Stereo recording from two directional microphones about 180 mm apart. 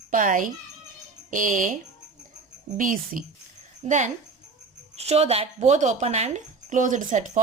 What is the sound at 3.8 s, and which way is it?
Speech, 40° right (ahead or behind).